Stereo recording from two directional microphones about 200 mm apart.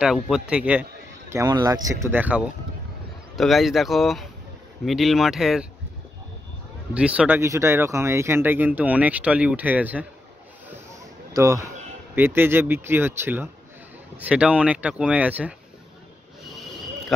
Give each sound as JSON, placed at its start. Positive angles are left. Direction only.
{"t": 0.0, "sound": "speech", "side_deg": -5}
{"t": 1.3, "sound": "speech", "side_deg": -15}
{"t": 6.9, "sound": "speech", "side_deg": -5}
{"t": 11.3, "sound": "speech", "side_deg": -15}